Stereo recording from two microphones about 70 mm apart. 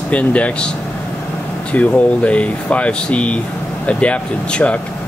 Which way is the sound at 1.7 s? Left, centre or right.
Centre.